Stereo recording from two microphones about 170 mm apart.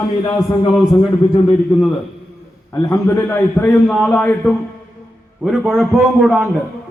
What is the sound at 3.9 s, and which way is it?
A man's voice, centre (ahead or behind).